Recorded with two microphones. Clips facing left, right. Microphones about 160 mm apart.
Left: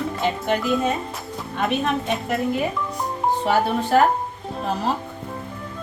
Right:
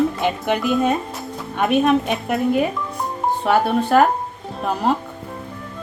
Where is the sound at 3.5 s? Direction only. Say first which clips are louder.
Right 4 dB; 55° right (ahead or behind).